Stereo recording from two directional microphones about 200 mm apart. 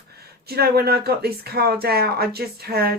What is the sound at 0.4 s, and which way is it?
Speech, 50° right (ahead or behind).